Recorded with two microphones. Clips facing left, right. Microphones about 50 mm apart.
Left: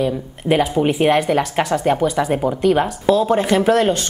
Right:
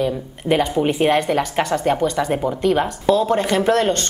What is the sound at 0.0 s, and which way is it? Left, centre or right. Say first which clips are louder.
A woman's voice: left 1 dB; centre.